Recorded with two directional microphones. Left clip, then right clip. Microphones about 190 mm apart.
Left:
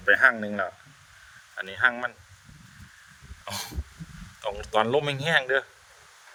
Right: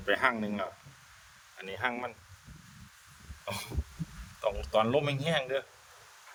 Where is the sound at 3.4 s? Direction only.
5° left (ahead or behind).